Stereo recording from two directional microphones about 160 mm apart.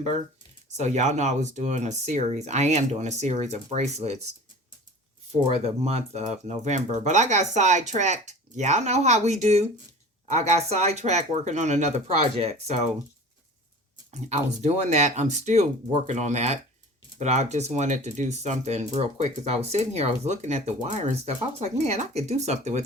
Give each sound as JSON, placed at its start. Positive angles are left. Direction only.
{"t": 0.8, "sound": "speech", "side_deg": -45}
{"t": 5.5, "sound": "speech", "side_deg": -40}
{"t": 14.1, "sound": "speech", "side_deg": -45}